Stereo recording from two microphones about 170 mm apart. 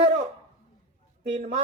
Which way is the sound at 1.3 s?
50° right (ahead or behind).